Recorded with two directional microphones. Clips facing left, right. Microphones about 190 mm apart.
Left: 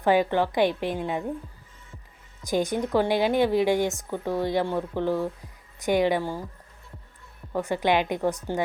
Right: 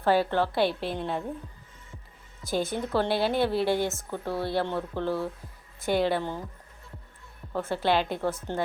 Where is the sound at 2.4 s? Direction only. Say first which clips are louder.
Left 4 dB; 15° left (ahead or behind).